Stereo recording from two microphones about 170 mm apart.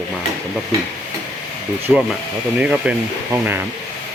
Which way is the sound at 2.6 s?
5° right (ahead or behind).